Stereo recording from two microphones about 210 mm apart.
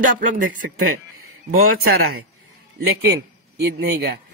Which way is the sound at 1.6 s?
50° right (ahead or behind).